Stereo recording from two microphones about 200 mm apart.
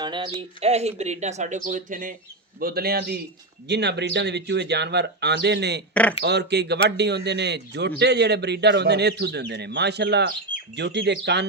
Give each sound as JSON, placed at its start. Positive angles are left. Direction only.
{"t": 0.0, "sound": "a man's voice", "side_deg": -20}
{"t": 5.9, "sound": "speech", "side_deg": 5}
{"t": 6.2, "sound": "a man's voice", "side_deg": -55}